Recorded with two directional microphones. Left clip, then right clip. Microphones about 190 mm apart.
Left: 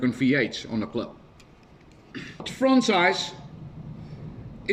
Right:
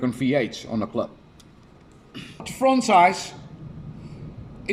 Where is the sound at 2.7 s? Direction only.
90° right.